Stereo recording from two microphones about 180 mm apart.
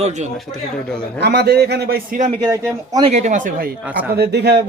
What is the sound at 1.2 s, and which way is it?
Speech, 65° right (ahead or behind).